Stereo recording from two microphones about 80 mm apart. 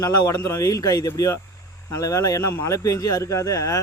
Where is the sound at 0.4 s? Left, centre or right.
Left.